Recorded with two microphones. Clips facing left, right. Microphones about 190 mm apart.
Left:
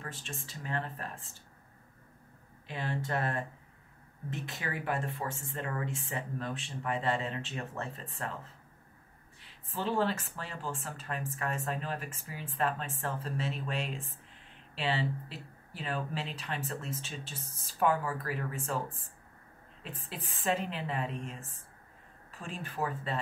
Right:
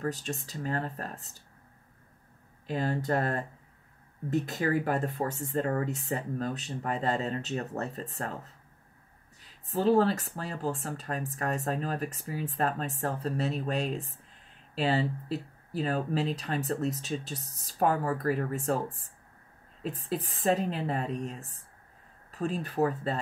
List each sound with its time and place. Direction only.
0.0 s speech: 40° right (ahead or behind)
2.6 s speech: 40° right (ahead or behind)
9.4 s speech: 40° right (ahead or behind)